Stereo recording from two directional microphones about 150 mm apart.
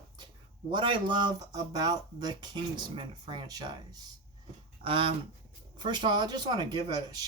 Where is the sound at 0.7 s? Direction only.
30° right (ahead or behind).